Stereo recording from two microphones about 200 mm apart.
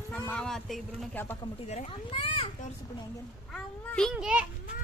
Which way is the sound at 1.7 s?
30° left (ahead or behind).